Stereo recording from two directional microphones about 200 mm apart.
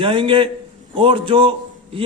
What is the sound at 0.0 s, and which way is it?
A man's voice, 25° right (ahead or behind).